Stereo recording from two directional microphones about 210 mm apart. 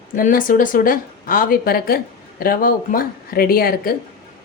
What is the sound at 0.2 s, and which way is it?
Speech, 40° left (ahead or behind).